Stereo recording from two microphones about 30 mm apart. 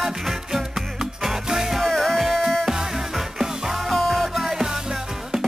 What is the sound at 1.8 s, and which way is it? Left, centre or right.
Music, centre.